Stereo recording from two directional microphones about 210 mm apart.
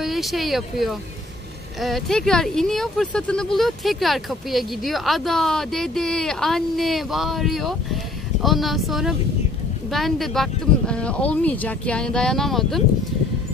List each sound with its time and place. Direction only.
0.0 s speech: centre (ahead or behind)